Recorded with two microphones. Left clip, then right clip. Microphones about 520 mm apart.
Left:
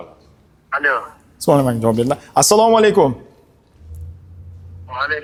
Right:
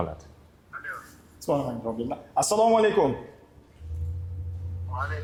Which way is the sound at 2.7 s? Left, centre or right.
Left.